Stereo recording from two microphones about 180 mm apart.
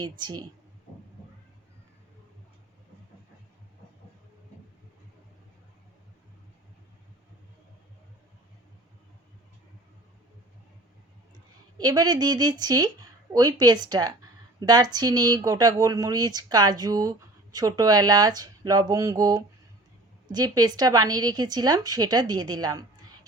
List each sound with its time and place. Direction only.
0.0 s a woman's voice: 25° right (ahead or behind)
11.8 s a woman's voice: 20° right (ahead or behind)